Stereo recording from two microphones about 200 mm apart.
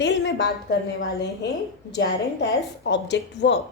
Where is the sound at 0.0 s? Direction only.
60° left (ahead or behind).